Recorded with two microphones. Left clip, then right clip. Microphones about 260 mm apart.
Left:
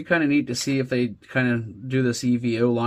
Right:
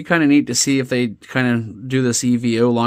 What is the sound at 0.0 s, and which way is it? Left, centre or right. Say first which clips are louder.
Speech: right 6 dB; right.